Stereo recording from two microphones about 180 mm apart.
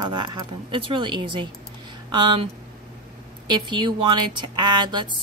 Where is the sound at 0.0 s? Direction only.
25° right (ahead or behind).